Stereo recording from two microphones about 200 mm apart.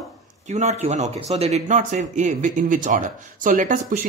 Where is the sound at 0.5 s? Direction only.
35° right (ahead or behind).